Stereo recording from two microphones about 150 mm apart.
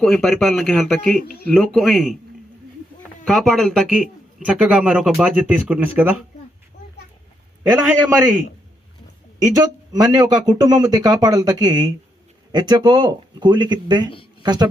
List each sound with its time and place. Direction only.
0.0 s speech: 5° left (ahead or behind)
3.2 s speech: centre (ahead or behind)
7.7 s speech: 15° right (ahead or behind)
9.4 s speech: 25° right (ahead or behind)